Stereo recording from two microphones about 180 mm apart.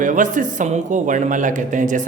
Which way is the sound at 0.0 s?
45° right (ahead or behind).